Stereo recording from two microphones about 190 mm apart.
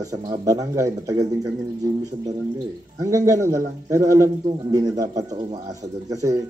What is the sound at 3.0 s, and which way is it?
A man's voice, 15° right (ahead or behind).